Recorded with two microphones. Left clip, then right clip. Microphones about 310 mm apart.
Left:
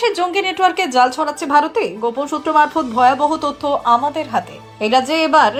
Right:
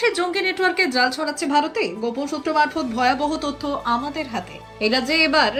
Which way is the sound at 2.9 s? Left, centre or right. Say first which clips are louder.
Left 7 dB; left.